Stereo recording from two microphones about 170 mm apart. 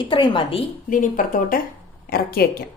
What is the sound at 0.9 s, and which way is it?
Speech, 50° left (ahead or behind).